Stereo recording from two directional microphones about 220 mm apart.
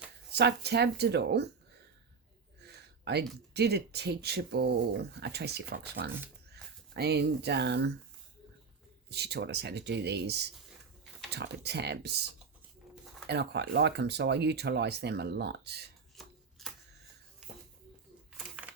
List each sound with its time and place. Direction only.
0.3 s speech: 50° right (ahead or behind)
2.6 s a sound: 50° right (ahead or behind)
3.5 s speech: 50° right (ahead or behind)
9.0 s speech: 50° right (ahead or behind)
13.2 s speech: 50° right (ahead or behind)
16.1 s shuffling cards: centre (ahead or behind)
18.3 s a sound: 5° right (ahead or behind)